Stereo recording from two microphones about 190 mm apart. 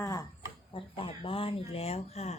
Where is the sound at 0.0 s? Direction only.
15° left (ahead or behind).